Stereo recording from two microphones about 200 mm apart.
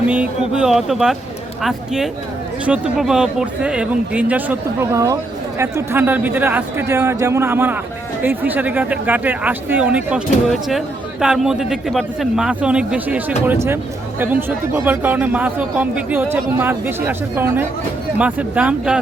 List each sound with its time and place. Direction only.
0.1 s speech: 5° right (ahead or behind)